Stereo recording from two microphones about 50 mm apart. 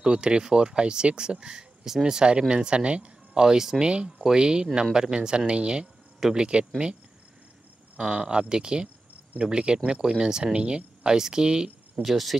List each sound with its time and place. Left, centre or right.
0.0 s speech: centre
3.8 s speech: centre
5.5 s insect: centre
6.3 s speech: centre
8.0 s speech: centre
12.0 s speech: centre